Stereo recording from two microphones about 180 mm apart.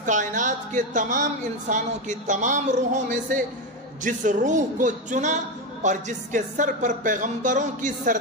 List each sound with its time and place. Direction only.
0.0 s a man's voice: 45° right (ahead or behind)